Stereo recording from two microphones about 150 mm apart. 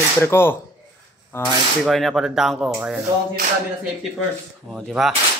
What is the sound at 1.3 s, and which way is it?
Speech, 5° left (ahead or behind).